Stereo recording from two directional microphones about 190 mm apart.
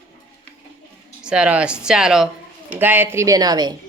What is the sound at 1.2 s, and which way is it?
Speech, 5° right (ahead or behind).